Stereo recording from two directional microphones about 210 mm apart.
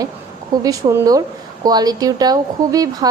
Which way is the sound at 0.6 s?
15° right (ahead or behind).